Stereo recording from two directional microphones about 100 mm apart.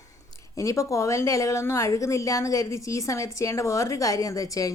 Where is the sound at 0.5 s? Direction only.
30° left (ahead or behind).